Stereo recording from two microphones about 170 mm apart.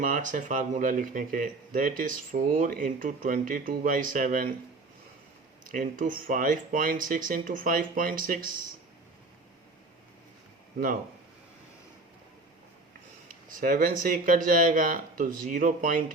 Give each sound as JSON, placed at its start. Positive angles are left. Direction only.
{"t": 0.0, "sound": "speech", "side_deg": -50}
{"t": 5.6, "sound": "speech", "side_deg": -55}
{"t": 13.5, "sound": "speech", "side_deg": -50}